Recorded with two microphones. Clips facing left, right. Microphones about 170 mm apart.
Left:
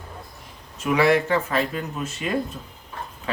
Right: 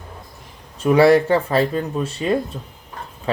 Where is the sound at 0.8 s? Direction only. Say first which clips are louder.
Right 6 dB; 35° right (ahead or behind).